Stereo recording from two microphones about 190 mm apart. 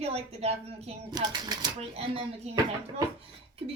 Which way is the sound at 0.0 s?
35° right (ahead or behind).